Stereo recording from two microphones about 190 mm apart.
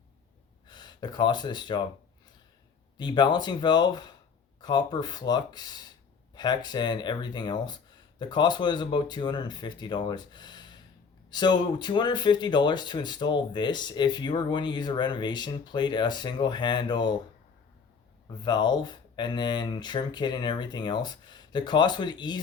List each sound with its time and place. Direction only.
0.7 s speech: 25° left (ahead or behind)
3.0 s speech: 25° left (ahead or behind)
18.4 s speech: 25° left (ahead or behind)